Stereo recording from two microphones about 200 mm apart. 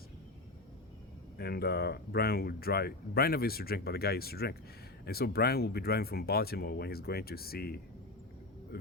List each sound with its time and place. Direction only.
1.4 s speech: 50° left (ahead or behind)